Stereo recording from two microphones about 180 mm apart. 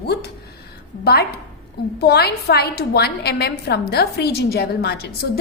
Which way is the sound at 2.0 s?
60° left (ahead or behind).